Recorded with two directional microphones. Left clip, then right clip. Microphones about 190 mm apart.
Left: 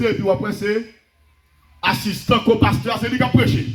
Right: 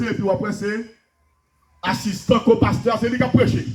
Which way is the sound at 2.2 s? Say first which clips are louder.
Even; 65° right (ahead or behind).